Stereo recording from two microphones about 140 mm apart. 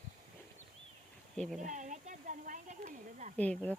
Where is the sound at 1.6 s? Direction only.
60° right (ahead or behind).